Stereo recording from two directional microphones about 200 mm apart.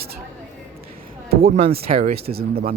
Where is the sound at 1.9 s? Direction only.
40° right (ahead or behind).